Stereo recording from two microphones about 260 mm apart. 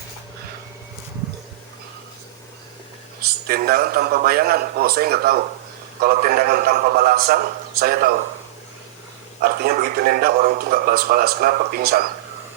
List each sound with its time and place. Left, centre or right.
3.2 s speech: right
9.4 s speech: right